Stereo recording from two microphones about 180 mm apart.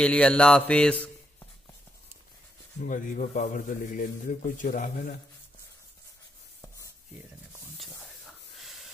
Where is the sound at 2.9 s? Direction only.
45° left (ahead or behind).